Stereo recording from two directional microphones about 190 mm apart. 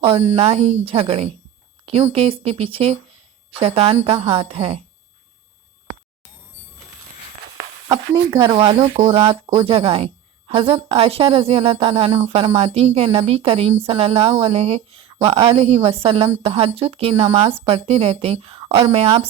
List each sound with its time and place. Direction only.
0.0 s a woman's voice: 25° right (ahead or behind)
7.9 s a woman's voice: 20° right (ahead or behind)